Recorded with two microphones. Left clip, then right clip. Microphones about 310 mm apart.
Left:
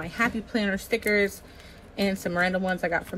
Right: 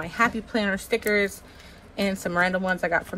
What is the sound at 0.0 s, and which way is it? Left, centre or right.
Speech, centre.